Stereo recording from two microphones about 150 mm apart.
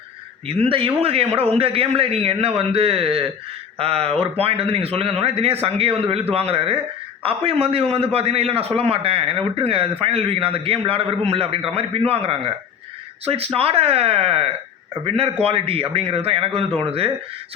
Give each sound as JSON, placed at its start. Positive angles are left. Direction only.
{"t": 0.4, "sound": "a man's voice", "side_deg": -40}